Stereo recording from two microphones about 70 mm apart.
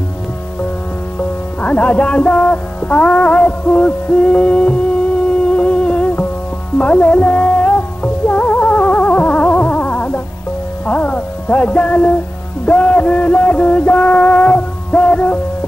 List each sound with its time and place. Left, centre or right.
1.6 s music: centre